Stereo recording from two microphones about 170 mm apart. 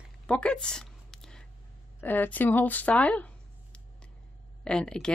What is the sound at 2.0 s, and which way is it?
Speech, 10° left (ahead or behind).